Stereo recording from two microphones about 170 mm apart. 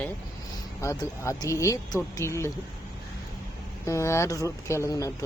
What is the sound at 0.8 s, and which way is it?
Speech, 15° left (ahead or behind).